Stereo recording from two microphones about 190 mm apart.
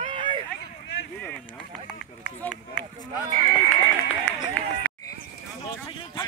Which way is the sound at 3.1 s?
20° left (ahead or behind).